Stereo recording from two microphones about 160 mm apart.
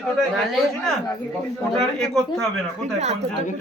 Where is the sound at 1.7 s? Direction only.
Centre (ahead or behind).